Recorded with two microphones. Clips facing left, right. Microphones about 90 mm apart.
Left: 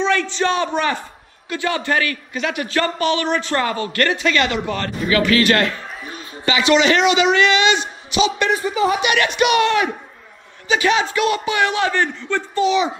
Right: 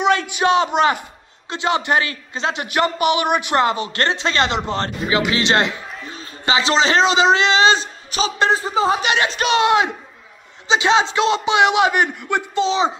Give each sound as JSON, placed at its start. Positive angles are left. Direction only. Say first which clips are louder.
{"t": 0.3, "sound": "a man's voice", "louder": "right 3 dB", "side_deg": -15}
{"t": 12.6, "sound": "a man's voice", "louder": "left 3 dB", "side_deg": -30}